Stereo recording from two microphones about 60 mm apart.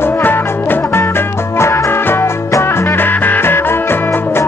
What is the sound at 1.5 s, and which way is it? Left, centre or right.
Music, left.